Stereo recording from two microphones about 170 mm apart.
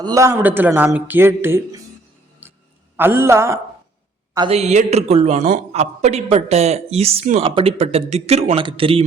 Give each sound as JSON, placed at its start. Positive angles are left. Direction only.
{"t": 0.0, "sound": "speech", "side_deg": -20}
{"t": 3.0, "sound": "speech", "side_deg": -15}
{"t": 4.4, "sound": "a man's voice", "side_deg": -35}